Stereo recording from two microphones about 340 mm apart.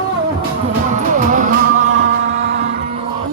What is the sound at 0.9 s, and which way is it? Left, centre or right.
Music, right.